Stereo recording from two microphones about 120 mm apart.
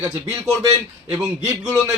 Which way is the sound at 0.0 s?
25° right (ahead or behind).